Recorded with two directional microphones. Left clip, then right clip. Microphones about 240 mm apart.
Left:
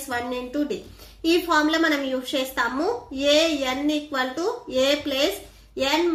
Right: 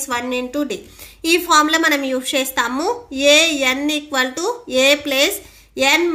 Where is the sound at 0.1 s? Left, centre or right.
Right.